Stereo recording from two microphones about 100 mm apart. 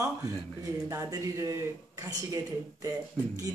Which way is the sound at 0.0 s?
30° right (ahead or behind).